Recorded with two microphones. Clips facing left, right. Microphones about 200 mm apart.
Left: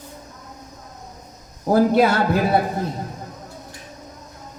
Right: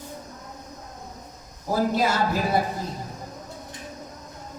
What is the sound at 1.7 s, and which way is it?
Speech, 60° left (ahead or behind).